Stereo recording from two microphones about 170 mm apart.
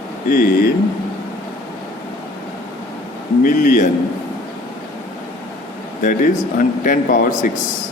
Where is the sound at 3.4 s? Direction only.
50° left (ahead or behind).